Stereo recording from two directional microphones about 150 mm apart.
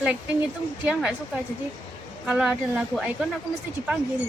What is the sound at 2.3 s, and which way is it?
Speech, 5° right (ahead or behind).